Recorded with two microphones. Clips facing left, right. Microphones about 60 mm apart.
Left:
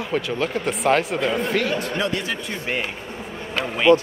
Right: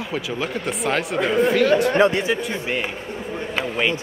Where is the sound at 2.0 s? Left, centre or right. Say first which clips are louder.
Right 7 dB; right.